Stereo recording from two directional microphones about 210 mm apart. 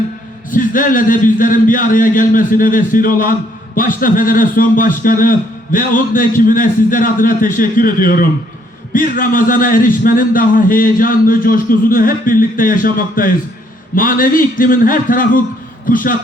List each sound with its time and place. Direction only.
0.5 s a man's voice: 40° left (ahead or behind)